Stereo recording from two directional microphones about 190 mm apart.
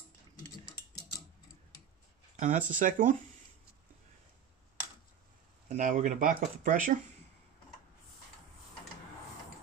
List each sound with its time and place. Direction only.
2.3 s speech: 40° right (ahead or behind)
5.8 s speech: 45° right (ahead or behind)